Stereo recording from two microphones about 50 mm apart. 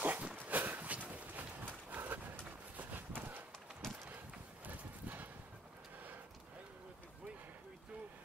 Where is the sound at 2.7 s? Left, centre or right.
Right.